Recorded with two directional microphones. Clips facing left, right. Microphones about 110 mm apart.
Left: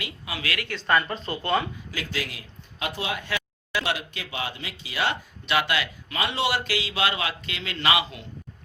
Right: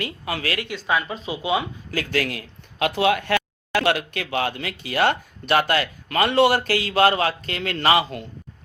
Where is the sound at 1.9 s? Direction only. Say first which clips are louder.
Right 8 dB; 50° right (ahead or behind).